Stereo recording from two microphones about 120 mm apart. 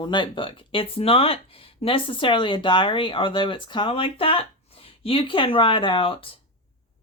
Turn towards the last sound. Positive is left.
turn(degrees=50)  # may be behind; listen again after turning